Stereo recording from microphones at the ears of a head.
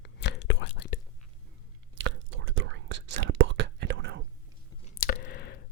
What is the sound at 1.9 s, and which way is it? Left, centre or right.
Whispering, right.